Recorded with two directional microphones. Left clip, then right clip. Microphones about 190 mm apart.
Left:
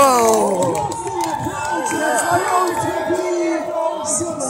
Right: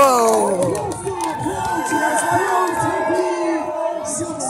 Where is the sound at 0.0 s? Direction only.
Centre (ahead or behind).